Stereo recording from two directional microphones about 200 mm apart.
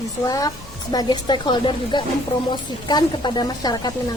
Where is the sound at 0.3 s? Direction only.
20° left (ahead or behind).